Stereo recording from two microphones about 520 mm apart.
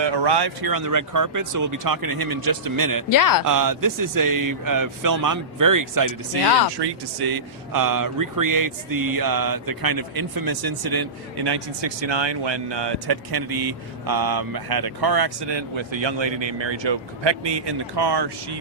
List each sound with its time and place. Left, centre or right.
0.0 s speech: right
3.1 s speech: left
3.4 s speech: right
6.7 s speech: right